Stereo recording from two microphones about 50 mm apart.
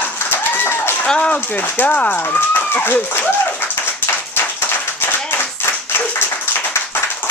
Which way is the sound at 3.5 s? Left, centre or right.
Left.